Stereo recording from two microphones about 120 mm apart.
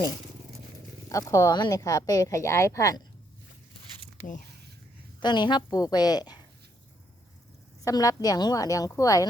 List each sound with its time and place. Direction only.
1.1 s a woman's voice: 25° left (ahead or behind)
5.2 s a woman's voice: 40° left (ahead or behind)
7.9 s a woman's voice: 30° left (ahead or behind)